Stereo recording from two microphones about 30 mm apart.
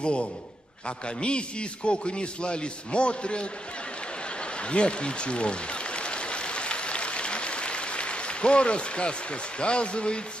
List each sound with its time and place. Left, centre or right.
0.0 s a man's voice: left
4.6 s applause: left